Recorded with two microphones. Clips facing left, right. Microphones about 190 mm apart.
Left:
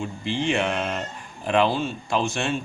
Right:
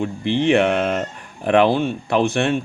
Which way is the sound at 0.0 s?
60° right (ahead or behind).